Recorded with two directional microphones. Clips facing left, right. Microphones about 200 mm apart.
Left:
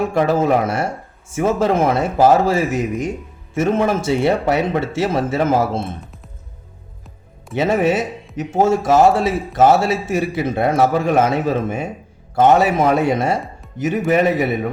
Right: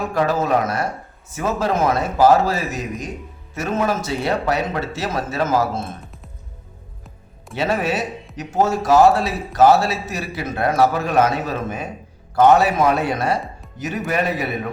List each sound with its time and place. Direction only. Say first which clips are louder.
0.1 s a man's voice: even; 25° left (ahead or behind)
7.5 s a man's voice: left 5 dB; 20° left (ahead or behind)